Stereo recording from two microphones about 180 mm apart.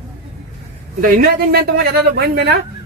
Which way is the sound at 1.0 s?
55° right (ahead or behind).